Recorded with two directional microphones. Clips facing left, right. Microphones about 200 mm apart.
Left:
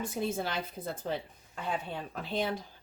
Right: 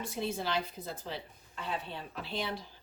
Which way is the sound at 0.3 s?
50° left (ahead or behind).